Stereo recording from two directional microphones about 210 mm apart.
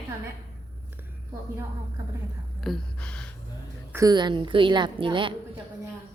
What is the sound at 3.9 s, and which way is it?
A woman's voice, 15° right (ahead or behind).